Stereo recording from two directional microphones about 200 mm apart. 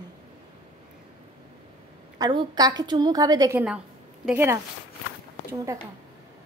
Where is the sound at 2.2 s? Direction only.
20° right (ahead or behind).